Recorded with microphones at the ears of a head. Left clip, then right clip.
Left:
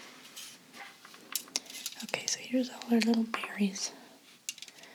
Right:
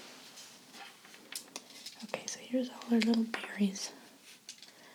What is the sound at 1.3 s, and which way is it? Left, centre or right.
Whispering, left.